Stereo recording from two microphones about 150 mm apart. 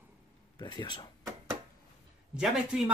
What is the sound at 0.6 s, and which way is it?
Speech, 30° left (ahead or behind).